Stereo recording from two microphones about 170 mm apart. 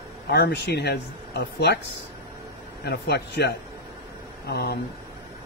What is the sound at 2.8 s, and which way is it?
A man's voice, 75° left (ahead or behind).